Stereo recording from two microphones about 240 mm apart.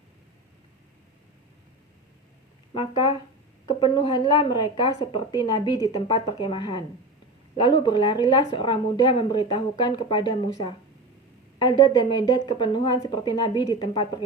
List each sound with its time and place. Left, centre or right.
2.7 s a woman's voice: centre